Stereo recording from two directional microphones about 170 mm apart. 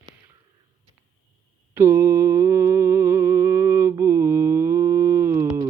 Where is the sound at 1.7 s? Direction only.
15° right (ahead or behind).